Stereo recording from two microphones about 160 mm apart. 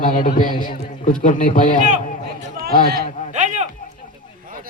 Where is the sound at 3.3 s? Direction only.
50° right (ahead or behind).